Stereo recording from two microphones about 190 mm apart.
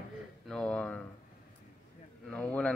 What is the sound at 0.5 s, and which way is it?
Speech, 5° left (ahead or behind).